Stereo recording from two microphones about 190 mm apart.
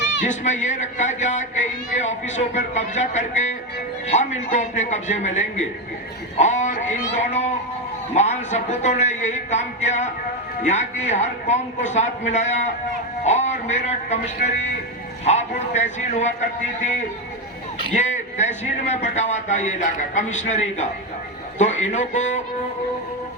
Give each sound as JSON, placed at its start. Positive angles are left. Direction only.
{"t": 0.3, "sound": "a man's voice", "side_deg": 40}
{"t": 6.3, "sound": "a sound", "side_deg": 40}
{"t": 8.1, "sound": "a man's voice", "side_deg": 35}
{"t": 17.9, "sound": "a man's voice", "side_deg": 40}